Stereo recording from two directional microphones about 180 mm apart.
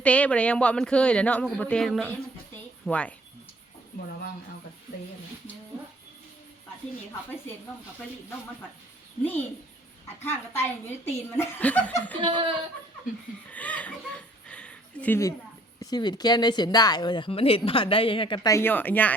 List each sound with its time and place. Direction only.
0.0 s speech: 5° left (ahead or behind)
10.2 s speech: 10° left (ahead or behind)
12.2 s speech: 25° right (ahead or behind)
13.5 s speech: 10° left (ahead or behind)
14.4 s a sound: 5° left (ahead or behind)
15.8 s speech: 20° left (ahead or behind)
18.5 s speech: 10° left (ahead or behind)